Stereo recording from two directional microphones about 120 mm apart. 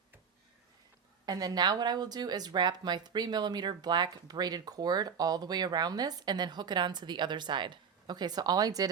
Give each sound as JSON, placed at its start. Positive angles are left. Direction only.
{"t": 1.2, "sound": "speech", "side_deg": -35}